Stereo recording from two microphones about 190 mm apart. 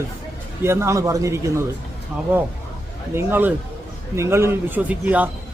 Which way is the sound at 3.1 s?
10° right (ahead or behind).